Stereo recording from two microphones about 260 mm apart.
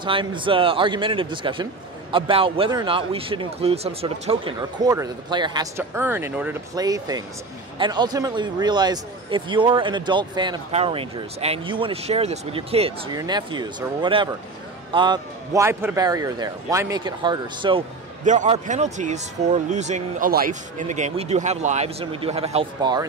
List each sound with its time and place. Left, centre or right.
0.0 s a man's voice: centre